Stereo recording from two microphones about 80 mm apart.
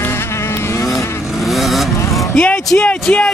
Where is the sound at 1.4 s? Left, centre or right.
Centre.